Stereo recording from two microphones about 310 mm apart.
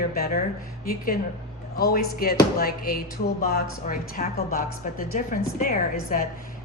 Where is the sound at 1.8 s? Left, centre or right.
Left.